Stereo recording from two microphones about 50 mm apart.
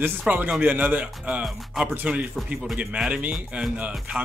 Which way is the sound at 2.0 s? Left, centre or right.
Right.